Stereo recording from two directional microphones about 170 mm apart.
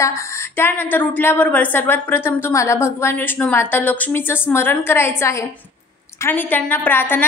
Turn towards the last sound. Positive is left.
turn(degrees=10)  # may be behind; listen again after turning